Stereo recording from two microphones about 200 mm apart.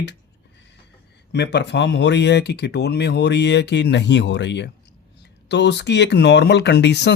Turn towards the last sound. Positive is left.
turn(degrees=60)  # may be behind; listen again after turning